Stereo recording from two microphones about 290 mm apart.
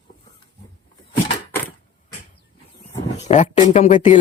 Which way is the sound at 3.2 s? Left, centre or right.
Left.